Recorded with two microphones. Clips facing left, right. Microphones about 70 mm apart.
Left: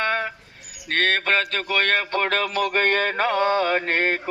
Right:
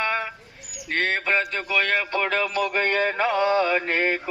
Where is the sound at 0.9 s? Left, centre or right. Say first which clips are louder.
Left 2 dB; left.